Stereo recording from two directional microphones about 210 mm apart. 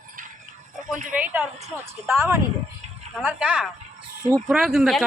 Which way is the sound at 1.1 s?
5° right (ahead or behind).